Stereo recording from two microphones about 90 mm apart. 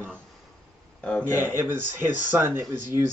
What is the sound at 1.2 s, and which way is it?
Speech, 20° right (ahead or behind).